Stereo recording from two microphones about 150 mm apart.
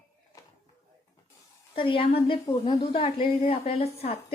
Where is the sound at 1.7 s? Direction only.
35° left (ahead or behind).